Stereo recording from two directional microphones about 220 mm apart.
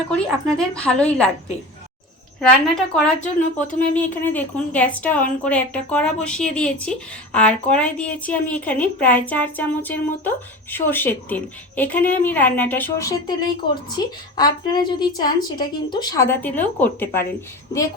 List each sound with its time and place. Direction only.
0.1 s a woman's voice: 5° left (ahead or behind)
2.4 s a woman's voice: 5° left (ahead or behind)